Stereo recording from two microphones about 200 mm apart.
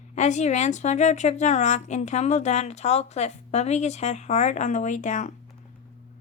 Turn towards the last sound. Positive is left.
turn(degrees=40)  # may be behind; listen again after turning